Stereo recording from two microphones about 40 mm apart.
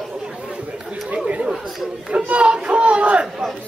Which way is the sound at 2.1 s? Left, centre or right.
Right.